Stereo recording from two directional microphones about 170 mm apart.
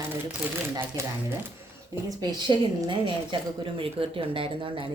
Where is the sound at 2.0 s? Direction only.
20° right (ahead or behind).